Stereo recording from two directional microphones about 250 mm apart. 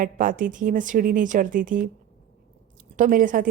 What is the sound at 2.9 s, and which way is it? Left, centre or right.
Speech, right.